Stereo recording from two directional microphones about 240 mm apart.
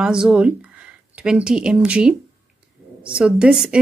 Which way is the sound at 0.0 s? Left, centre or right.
Centre.